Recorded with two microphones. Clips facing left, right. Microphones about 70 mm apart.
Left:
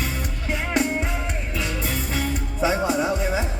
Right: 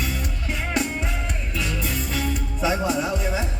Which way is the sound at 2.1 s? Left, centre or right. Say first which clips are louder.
Even; left.